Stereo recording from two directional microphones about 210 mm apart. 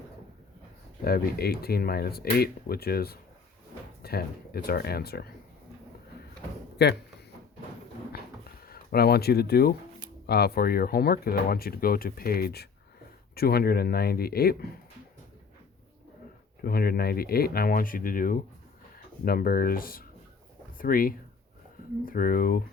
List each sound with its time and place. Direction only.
1.0 s speech: 45° left (ahead or behind)
6.8 s speech: 55° left (ahead or behind)
8.6 s speech: 45° left (ahead or behind)
16.6 s speech: 45° left (ahead or behind)